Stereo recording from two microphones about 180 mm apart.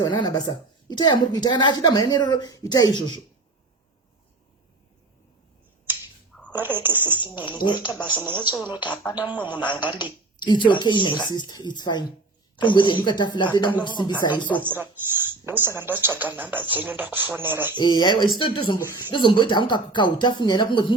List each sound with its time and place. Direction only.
0.0 s a woman's voice: 25° left (ahead or behind)
6.5 s speech: 10° right (ahead or behind)
7.6 s a woman's voice: 25° left (ahead or behind)
8.0 s speech: 10° right (ahead or behind)
10.0 s a woman's voice: 25° left (ahead or behind)
14.6 s speech: 10° right (ahead or behind)
17.7 s a woman's voice: 25° left (ahead or behind)
18.8 s speech: 15° right (ahead or behind)
19.1 s a woman's voice: 25° left (ahead or behind)